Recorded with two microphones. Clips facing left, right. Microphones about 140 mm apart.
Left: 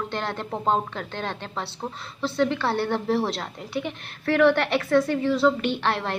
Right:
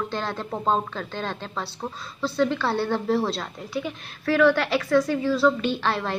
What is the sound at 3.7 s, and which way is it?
A woman's voice, 60° left (ahead or behind).